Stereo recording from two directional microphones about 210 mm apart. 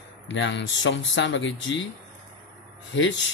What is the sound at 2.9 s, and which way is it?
Speech, 60° left (ahead or behind).